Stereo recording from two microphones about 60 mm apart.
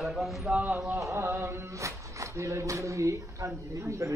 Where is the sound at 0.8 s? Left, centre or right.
Right.